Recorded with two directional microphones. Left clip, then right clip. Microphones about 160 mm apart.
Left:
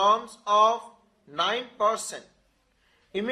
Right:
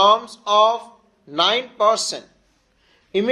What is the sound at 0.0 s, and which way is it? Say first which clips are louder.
A man's voice: right 7 dB; 35° right (ahead or behind).